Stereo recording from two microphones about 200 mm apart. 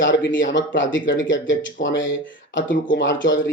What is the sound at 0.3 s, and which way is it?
A man's voice, 70° left (ahead or behind).